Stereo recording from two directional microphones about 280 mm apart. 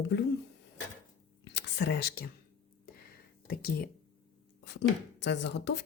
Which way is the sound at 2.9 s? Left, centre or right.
Left.